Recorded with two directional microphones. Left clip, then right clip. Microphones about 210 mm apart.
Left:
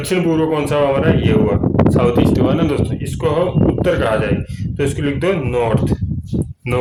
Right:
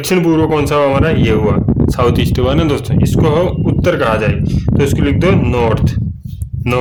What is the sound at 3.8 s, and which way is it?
Speech, 45° right (ahead or behind).